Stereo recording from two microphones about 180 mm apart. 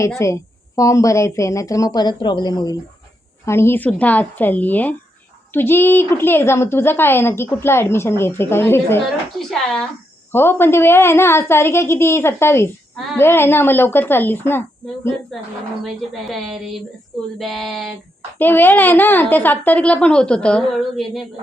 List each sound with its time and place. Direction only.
0.2 s a woman's voice: 15° left (ahead or behind)
9.4 s a sound: 5° left (ahead or behind)
10.3 s a woman's voice: 10° left (ahead or behind)
15.8 s a woman's voice: centre (ahead or behind)
18.3 s a woman's voice: 10° left (ahead or behind)